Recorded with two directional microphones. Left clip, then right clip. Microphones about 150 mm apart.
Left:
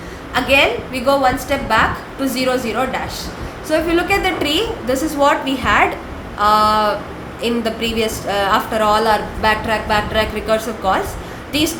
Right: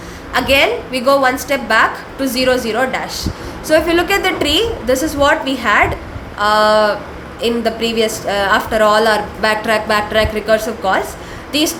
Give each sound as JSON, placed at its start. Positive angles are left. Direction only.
{"t": 0.3, "sound": "a woman's voice", "side_deg": -35}